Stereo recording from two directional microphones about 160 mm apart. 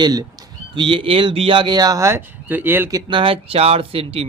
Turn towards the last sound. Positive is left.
turn(degrees=-35)  # may be behind; listen again after turning